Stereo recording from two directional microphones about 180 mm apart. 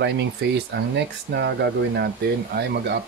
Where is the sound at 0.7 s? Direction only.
75° right (ahead or behind).